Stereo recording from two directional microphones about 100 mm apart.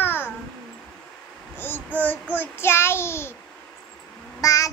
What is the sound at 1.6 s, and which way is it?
Child singing, 20° left (ahead or behind).